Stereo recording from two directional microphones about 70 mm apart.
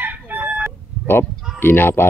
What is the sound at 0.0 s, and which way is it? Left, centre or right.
Crowing, right.